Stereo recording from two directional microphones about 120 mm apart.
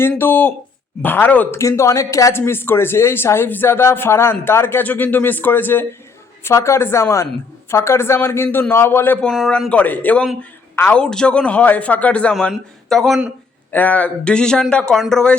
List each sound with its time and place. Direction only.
0.2 s a man's voice: 15° left (ahead or behind)
9.2 s a man's voice: 5° left (ahead or behind)
13.7 s a man's voice: 15° left (ahead or behind)